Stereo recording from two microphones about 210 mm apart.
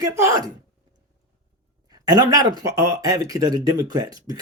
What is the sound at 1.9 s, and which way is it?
Speech, 20° right (ahead or behind).